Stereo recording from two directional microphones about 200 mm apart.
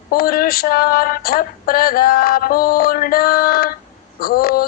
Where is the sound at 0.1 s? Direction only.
45° left (ahead or behind).